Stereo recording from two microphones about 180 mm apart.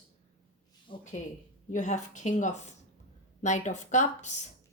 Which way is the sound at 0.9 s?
30° left (ahead or behind).